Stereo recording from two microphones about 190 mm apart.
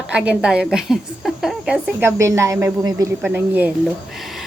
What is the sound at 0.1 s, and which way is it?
A woman's voice, 5° right (ahead or behind).